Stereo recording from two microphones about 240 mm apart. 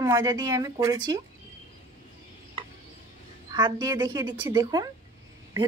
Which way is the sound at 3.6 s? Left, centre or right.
Centre.